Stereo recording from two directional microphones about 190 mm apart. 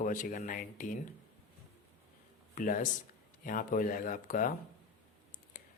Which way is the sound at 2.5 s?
45° left (ahead or behind).